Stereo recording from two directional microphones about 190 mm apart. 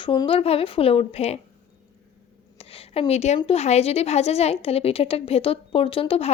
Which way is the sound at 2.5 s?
30° left (ahead or behind).